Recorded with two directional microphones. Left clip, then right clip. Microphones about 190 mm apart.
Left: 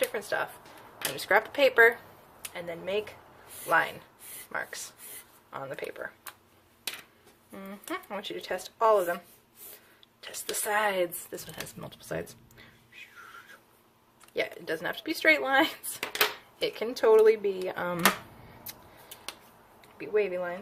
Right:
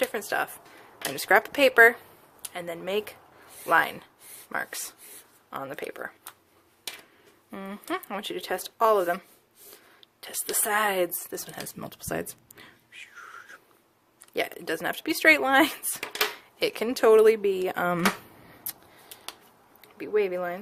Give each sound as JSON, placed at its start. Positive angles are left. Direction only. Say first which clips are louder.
{"t": 0.0, "sound": "speech", "louder": "right 2 dB", "side_deg": -50}
{"t": 7.5, "sound": "speech", "louder": "right 5 dB", "side_deg": -50}
{"t": 19.8, "sound": "speech", "louder": "right 2 dB", "side_deg": -50}